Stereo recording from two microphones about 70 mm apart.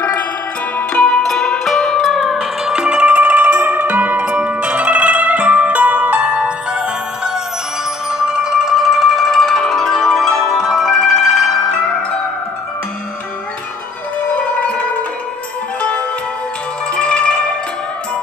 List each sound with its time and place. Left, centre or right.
0.7 s zither: centre
8.1 s music: centre
16.9 s zither: centre